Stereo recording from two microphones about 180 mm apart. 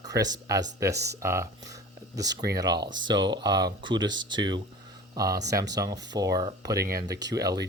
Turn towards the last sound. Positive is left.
turn(degrees=-20)  # may be behind; listen again after turning